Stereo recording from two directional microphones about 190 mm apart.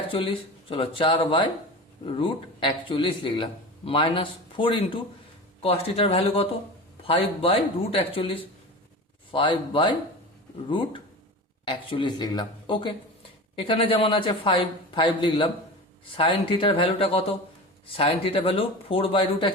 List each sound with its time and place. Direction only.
0.7 s a man's voice: 25° left (ahead or behind)